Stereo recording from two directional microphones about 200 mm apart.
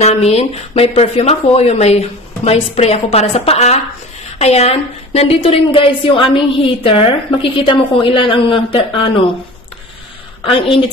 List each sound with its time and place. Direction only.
0.0 s a woman's voice: 30° left (ahead or behind)
10.4 s a woman's voice: 25° left (ahead or behind)